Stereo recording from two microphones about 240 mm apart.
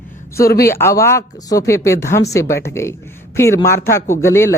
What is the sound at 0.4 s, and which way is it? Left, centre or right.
Speech, left.